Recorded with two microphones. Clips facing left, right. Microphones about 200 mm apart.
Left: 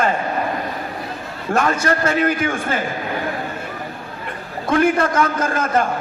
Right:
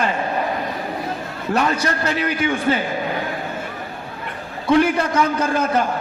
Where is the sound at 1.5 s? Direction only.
45° left (ahead or behind).